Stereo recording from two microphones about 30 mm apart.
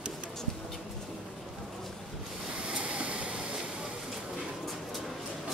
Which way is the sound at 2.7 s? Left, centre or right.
Right.